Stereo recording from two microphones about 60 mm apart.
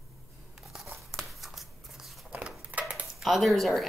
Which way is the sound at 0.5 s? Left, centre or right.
Centre.